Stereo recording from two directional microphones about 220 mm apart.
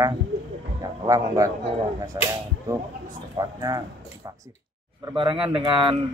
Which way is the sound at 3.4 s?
15° right (ahead or behind).